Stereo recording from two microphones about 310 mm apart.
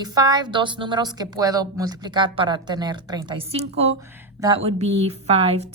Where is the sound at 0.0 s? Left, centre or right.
Centre.